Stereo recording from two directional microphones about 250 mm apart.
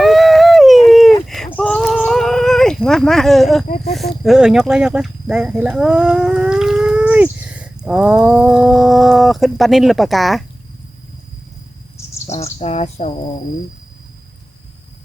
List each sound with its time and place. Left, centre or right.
0.0 s a sound: centre
3.9 s speech: centre
11.9 s bird: centre
12.3 s speech: left